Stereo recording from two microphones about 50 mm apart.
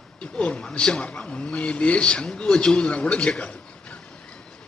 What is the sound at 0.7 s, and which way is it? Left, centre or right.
A man's voice, centre.